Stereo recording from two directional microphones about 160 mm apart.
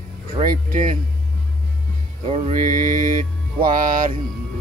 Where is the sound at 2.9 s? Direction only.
55° right (ahead or behind).